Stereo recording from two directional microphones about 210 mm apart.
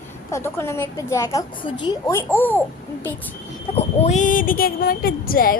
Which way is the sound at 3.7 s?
30° left (ahead or behind).